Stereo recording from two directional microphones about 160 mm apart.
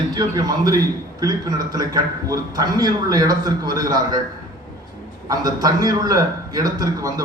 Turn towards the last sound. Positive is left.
turn(degrees=-25)  # may be behind; listen again after turning